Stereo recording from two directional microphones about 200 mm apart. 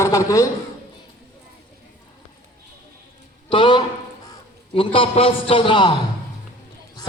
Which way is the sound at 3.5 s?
25° left (ahead or behind).